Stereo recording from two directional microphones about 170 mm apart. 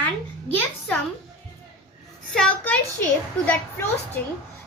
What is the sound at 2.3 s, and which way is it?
A child's voice, 5° left (ahead or behind).